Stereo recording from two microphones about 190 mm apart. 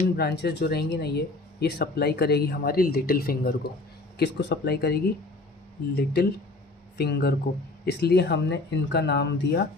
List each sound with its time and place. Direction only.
0.2 s speech: 60° left (ahead or behind)